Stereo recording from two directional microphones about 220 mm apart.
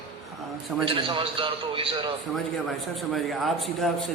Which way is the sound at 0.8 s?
25° right (ahead or behind).